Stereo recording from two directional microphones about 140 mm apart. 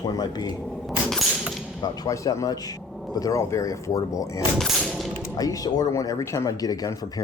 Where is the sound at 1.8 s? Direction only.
30° left (ahead or behind).